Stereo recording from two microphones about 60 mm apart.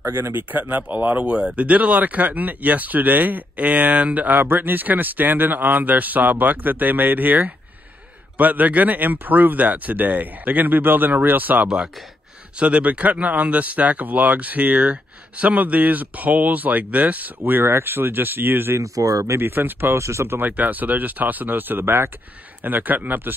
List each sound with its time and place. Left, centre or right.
0.0 s speech: right
18.8 s speech: right
19.3 s speech: right
20.0 s speech: right
20.3 s speech: right